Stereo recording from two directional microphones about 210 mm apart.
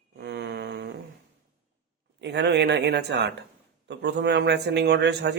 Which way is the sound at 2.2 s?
55° right (ahead or behind).